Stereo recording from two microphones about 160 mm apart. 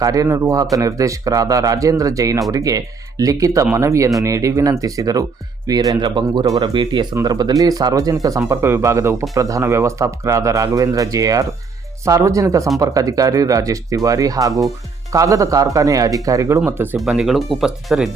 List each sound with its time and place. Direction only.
0.0 s speech: 20° right (ahead or behind)
17.0 s speech: centre (ahead or behind)